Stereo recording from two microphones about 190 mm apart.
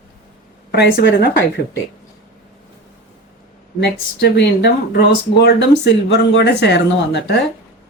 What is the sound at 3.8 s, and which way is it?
Speech, 60° left (ahead or behind).